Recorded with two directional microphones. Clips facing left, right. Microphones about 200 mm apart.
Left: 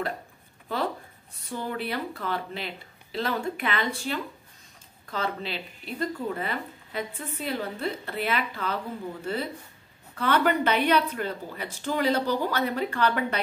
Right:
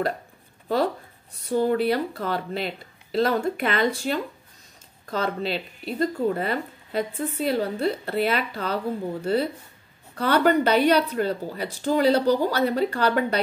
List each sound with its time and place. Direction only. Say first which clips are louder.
1.5 s speech: right 10 dB; 40° right (ahead or behind)